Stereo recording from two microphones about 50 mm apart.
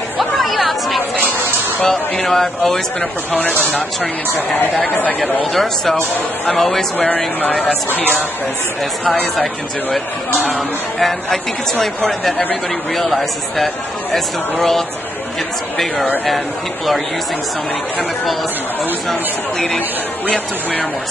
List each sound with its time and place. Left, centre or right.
0.2 s chatter: centre
1.9 s speech: centre
3.0 s speech: left
4.8 s speech: left
5.4 s speech: centre
7.9 s speech: right
9.0 s speech: left
11.0 s speech: centre
12.9 s speech: centre